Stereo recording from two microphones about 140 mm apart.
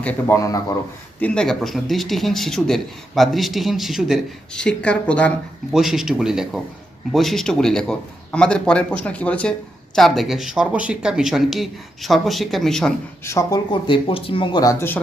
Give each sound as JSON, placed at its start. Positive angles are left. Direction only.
{"t": 0.0, "sound": "a man's voice", "side_deg": 10}
{"t": 0.3, "sound": "speech", "side_deg": 25}
{"t": 1.2, "sound": "a man's voice", "side_deg": 5}
{"t": 5.7, "sound": "a man's voice", "side_deg": 0}
{"t": 13.2, "sound": "speech", "side_deg": 20}
{"t": 13.8, "sound": "speech", "side_deg": 40}